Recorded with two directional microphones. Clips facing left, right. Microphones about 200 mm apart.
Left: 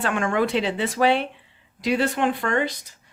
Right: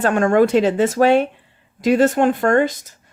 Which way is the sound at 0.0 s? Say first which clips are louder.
Right 8 dB; 40° right (ahead or behind).